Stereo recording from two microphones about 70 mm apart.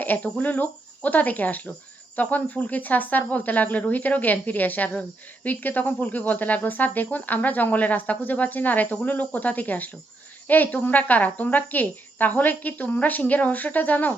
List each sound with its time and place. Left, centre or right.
0.0 s speech: left